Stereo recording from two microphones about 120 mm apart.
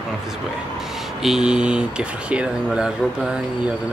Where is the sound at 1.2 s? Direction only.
5° right (ahead or behind).